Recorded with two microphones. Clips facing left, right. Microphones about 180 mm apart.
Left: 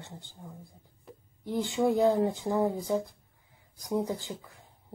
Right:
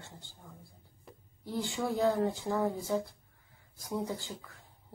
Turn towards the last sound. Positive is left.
turn(degrees=20)  # may be behind; listen again after turning